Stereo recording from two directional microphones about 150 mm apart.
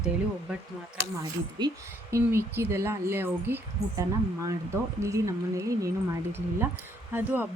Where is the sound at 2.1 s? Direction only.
15° right (ahead or behind).